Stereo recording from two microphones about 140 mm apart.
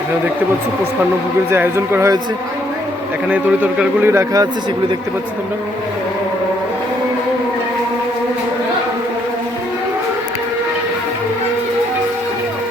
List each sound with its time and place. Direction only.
1.5 s speech: 15° right (ahead or behind)
3.2 s speech: 10° right (ahead or behind)